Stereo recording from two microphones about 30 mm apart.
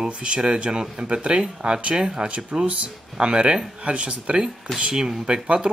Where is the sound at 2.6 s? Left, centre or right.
Right.